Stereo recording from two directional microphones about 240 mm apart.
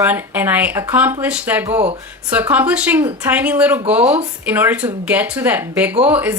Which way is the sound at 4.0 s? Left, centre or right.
Right.